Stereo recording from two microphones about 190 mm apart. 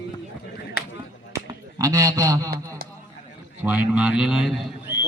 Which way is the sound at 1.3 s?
15° right (ahead or behind).